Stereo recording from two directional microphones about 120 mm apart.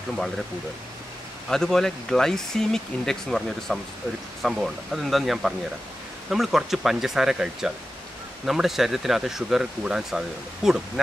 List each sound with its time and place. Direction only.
1.5 s speech: 5° left (ahead or behind)